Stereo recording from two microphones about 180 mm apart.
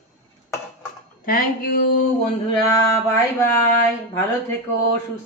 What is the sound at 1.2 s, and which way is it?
Speech, 55° left (ahead or behind).